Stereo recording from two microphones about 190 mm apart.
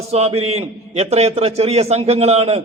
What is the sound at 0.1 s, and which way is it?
A man's voice, 35° right (ahead or behind).